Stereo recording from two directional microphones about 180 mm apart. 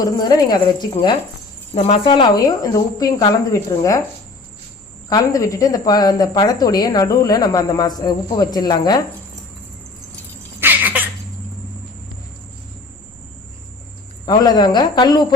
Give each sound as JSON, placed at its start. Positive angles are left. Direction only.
{"t": 0.0, "sound": "speech", "side_deg": 20}
{"t": 5.0, "sound": "speech", "side_deg": 20}
{"t": 10.6, "sound": "a sound", "side_deg": -10}
{"t": 14.3, "sound": "speech", "side_deg": 25}